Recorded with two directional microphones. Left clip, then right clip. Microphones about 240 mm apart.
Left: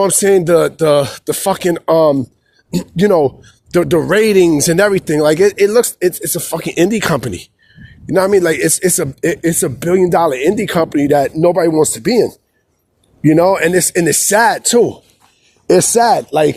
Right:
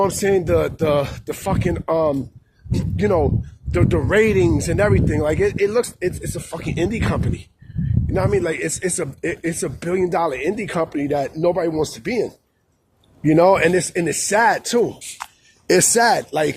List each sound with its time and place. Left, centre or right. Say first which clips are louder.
0.0 s speech: left 7 dB; left